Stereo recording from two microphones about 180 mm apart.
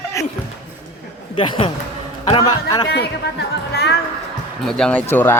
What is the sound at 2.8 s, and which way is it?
A man's voice, 65° left (ahead or behind).